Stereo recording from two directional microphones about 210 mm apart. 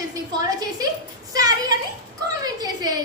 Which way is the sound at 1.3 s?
15° right (ahead or behind).